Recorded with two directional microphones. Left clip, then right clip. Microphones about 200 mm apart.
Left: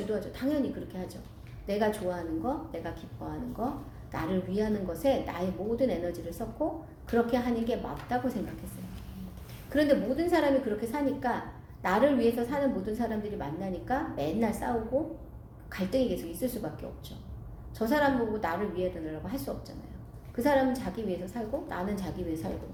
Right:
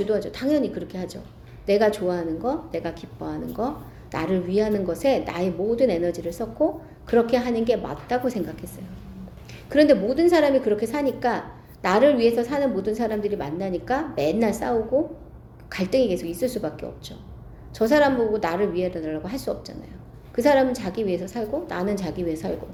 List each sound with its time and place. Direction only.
0.1 s a woman's voice: 45° right (ahead or behind)
9.6 s a woman's voice: 45° right (ahead or behind)
15.7 s a woman's voice: 50° right (ahead or behind)